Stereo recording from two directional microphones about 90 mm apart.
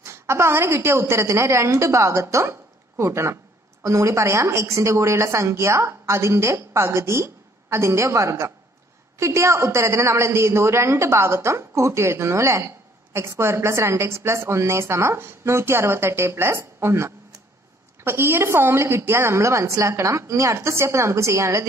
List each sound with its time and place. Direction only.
0.0 s a woman's voice: 30° right (ahead or behind)